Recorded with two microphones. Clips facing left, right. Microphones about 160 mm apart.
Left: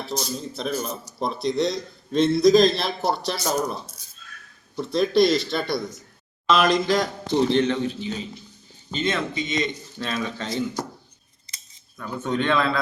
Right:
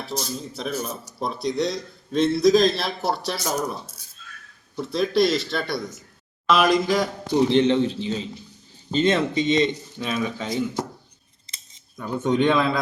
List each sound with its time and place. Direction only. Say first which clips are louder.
0.2 s speech: left 1 dB; 5° right (ahead or behind); by 9.6 s 35° right (ahead or behind)
10.2 s speech: right 2 dB; 10° right (ahead or behind)
11.4 s scissors: right 1 dB; 20° right (ahead or behind)